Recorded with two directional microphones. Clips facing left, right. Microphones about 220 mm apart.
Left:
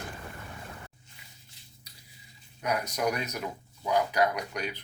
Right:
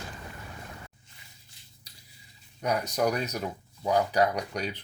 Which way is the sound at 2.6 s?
35° right (ahead or behind).